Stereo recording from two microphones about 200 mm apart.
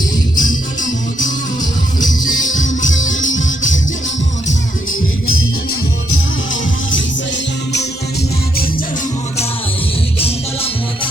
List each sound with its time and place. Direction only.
0.3 s music: 40° left (ahead or behind)
2.9 s music: 70° left (ahead or behind)
4.9 s music: 90° left
10.2 s music: 30° left (ahead or behind)